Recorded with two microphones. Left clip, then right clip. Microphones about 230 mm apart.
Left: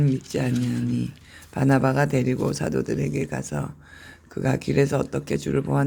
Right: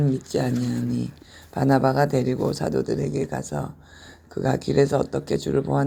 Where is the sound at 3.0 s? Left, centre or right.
Left.